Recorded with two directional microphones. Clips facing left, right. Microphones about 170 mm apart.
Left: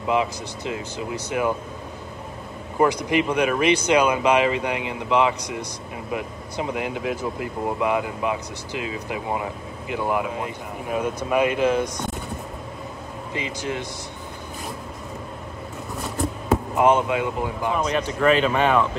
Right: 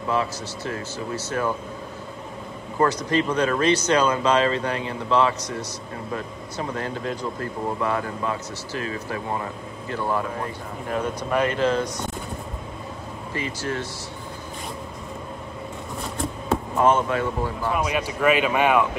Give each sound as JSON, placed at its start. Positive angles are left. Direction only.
{"t": 0.0, "sound": "speech", "side_deg": 15}
{"t": 2.8, "sound": "speech", "side_deg": 15}
{"t": 13.3, "sound": "speech", "side_deg": 15}
{"t": 16.0, "sound": "a sound", "side_deg": 0}
{"t": 16.7, "sound": "speech", "side_deg": 15}
{"t": 17.7, "sound": "speech", "side_deg": -10}